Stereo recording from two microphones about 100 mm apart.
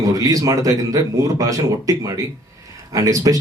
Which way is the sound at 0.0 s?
40° right (ahead or behind).